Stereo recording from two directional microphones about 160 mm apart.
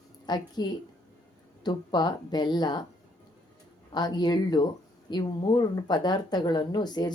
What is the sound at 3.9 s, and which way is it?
Speech, 25° left (ahead or behind).